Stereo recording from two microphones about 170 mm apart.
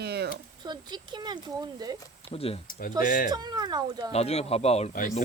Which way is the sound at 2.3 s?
35° left (ahead or behind).